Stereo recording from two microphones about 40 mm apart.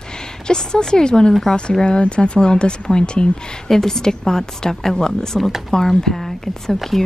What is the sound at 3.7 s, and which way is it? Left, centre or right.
Speech, centre.